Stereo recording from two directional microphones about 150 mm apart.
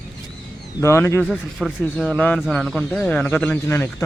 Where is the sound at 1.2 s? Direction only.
Centre (ahead or behind).